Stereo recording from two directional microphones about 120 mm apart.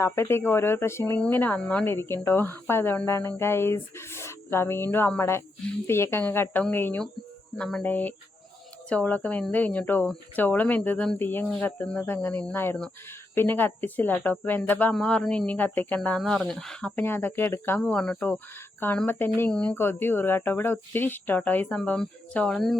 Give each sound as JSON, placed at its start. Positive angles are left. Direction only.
{"t": 0.0, "sound": "a woman's voice", "side_deg": 20}
{"t": 16.9, "sound": "speech", "side_deg": 15}